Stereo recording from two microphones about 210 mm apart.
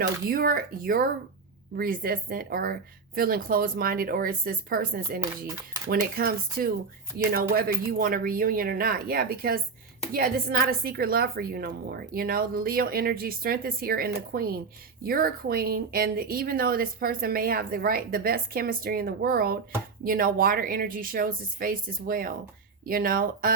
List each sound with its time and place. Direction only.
0.0 s speech: 45° right (ahead or behind)